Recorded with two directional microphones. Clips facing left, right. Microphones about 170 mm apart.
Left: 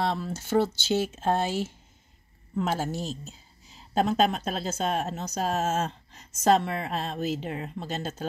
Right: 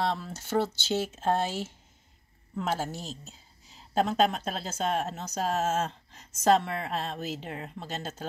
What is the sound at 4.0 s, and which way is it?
Speech, 20° left (ahead or behind).